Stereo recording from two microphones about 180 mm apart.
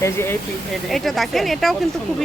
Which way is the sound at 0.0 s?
15° left (ahead or behind).